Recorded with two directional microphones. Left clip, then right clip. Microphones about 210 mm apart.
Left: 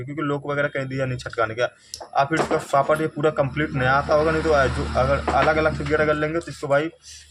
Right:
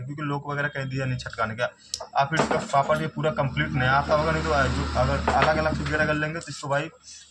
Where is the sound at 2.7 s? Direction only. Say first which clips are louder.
Left 4 dB; 45° left (ahead or behind).